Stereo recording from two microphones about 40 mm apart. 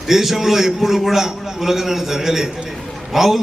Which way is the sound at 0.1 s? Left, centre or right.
Centre.